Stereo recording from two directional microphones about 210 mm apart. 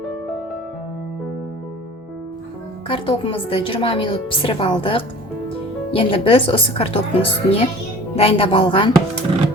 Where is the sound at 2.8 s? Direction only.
25° left (ahead or behind).